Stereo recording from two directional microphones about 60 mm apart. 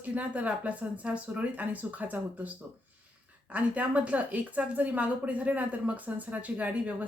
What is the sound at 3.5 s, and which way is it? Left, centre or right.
Speech, right.